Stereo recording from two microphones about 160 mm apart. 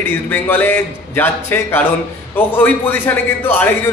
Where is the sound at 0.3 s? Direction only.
10° left (ahead or behind).